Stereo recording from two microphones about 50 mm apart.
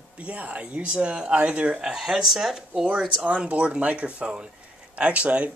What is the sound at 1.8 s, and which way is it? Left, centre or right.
Speech, centre.